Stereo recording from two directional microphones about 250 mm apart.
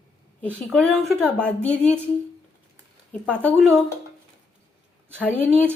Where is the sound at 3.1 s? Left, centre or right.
Centre.